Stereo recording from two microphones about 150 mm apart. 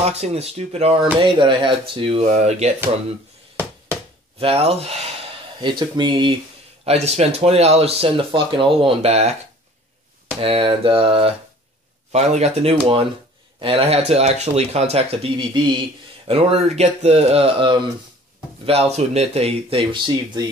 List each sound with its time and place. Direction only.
0.0 s speech: 45° right (ahead or behind)
1.1 s speech: 35° right (ahead or behind)
4.4 s speech: 40° right (ahead or behind)
6.8 s speech: 45° right (ahead or behind)
10.4 s speech: 40° right (ahead or behind)